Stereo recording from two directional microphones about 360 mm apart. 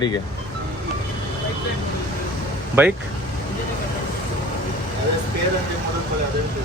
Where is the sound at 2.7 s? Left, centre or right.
Centre.